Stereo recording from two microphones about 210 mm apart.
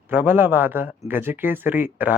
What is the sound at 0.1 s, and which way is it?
Speech, 10° right (ahead or behind).